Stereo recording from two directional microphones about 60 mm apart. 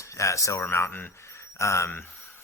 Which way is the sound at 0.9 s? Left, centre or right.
Left.